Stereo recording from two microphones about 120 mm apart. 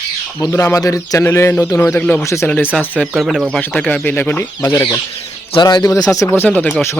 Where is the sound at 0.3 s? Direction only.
25° left (ahead or behind).